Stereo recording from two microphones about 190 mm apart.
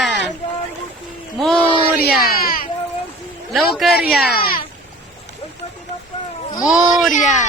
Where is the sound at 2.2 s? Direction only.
50° left (ahead or behind).